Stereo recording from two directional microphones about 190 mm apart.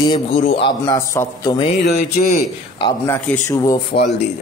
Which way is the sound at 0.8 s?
15° left (ahead or behind).